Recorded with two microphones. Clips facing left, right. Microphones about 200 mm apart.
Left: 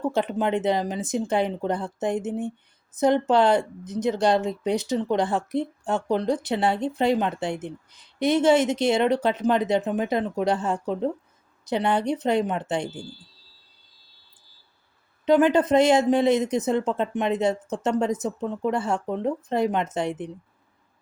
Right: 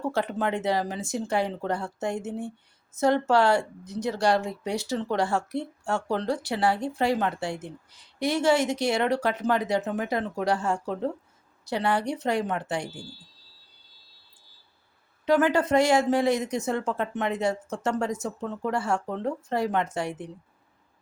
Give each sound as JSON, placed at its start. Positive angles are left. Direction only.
{"t": 0.0, "sound": "speech", "side_deg": 20}
{"t": 15.3, "sound": "speech", "side_deg": 20}